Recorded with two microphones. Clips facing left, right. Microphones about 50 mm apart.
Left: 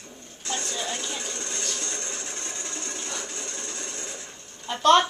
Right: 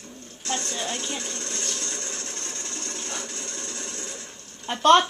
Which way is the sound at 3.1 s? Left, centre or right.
Centre.